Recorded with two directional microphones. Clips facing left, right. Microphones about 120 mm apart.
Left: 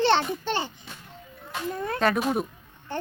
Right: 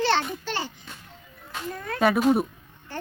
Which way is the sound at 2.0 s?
10° right (ahead or behind).